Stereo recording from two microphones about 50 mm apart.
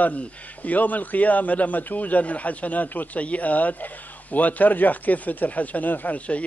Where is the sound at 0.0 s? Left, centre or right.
Left.